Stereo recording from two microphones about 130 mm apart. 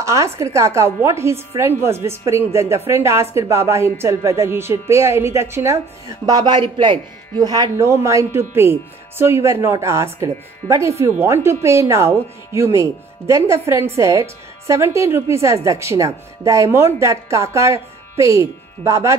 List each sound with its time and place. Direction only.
0.0 s a woman's voice: 25° right (ahead or behind)